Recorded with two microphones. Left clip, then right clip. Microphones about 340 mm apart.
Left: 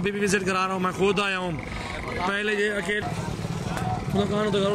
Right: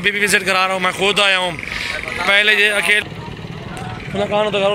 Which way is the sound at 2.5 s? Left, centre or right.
Right.